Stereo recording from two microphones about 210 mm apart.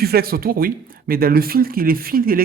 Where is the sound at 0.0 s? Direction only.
45° right (ahead or behind).